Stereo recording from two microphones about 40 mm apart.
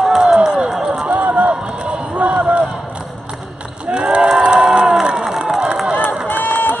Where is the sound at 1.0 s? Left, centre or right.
Right.